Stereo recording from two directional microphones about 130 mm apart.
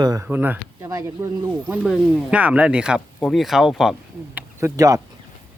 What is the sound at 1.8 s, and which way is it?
Speech, 5° right (ahead or behind).